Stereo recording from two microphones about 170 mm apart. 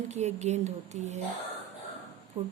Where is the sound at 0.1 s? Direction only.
40° right (ahead or behind).